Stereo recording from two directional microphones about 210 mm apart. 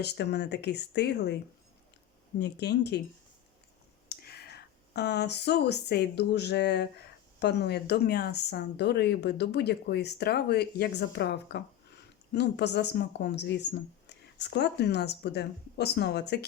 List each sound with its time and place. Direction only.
0.0 s speech: 55° left (ahead or behind)
2.4 s speech: 50° left (ahead or behind)
4.1 s speech: 50° left (ahead or behind)